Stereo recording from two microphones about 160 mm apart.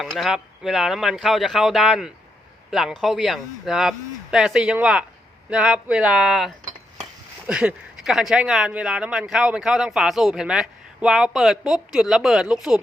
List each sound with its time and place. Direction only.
0.0 s speech: centre (ahead or behind)